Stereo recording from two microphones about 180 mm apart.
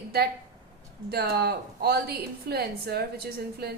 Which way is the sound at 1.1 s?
60° right (ahead or behind).